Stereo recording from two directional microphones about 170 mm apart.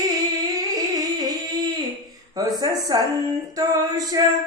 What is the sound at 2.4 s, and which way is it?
Music, 20° right (ahead or behind).